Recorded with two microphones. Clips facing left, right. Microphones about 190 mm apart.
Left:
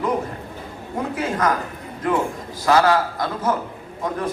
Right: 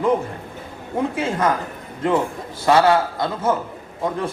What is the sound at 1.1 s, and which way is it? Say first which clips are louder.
A man's voice: left 2 dB; 25° right (ahead or behind).